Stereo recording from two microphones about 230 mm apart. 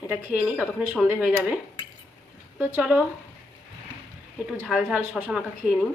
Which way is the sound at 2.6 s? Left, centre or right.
Centre.